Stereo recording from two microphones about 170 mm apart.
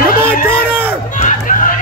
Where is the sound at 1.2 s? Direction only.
50° left (ahead or behind).